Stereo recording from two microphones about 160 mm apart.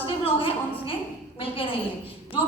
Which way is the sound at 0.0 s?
35° left (ahead or behind).